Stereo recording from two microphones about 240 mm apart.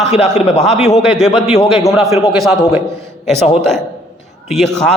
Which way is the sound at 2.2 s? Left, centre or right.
Centre.